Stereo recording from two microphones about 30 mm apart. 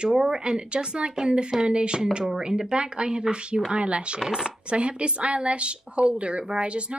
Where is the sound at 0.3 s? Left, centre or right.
Right.